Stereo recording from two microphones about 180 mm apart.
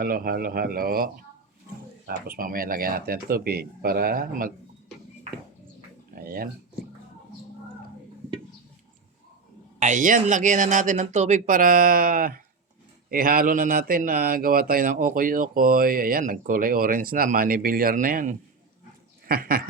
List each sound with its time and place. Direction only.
0.0 s speech: 55° right (ahead or behind)
6.1 s dog: 55° right (ahead or behind)
9.8 s speech: 45° right (ahead or behind)